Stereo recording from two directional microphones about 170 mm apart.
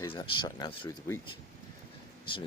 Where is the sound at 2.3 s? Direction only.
30° left (ahead or behind).